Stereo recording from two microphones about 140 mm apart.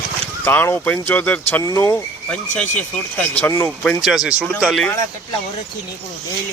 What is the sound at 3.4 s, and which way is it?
Speech, 15° left (ahead or behind).